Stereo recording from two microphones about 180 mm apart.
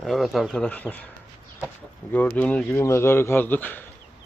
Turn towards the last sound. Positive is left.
turn(degrees=10)  # may be behind; listen again after turning